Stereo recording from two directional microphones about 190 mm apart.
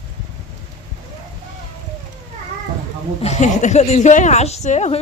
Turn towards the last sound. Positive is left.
turn(degrees=35)  # may be behind; listen again after turning